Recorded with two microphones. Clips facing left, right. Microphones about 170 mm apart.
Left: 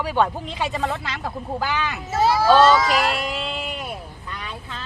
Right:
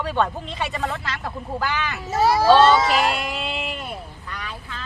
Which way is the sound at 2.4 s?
25° right (ahead or behind).